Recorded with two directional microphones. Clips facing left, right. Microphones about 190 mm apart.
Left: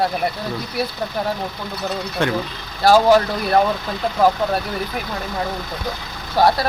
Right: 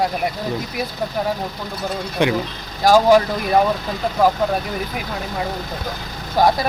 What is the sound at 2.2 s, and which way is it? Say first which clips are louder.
Speech: right 3 dB; 15° right (ahead or behind).